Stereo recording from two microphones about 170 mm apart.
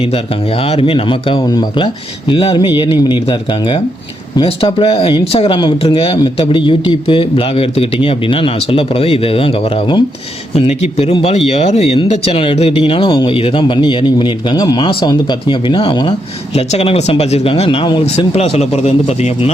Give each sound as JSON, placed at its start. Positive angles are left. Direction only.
{"t": 0.8, "sound": "speech", "side_deg": 35}
{"t": 10.5, "sound": "speech", "side_deg": 40}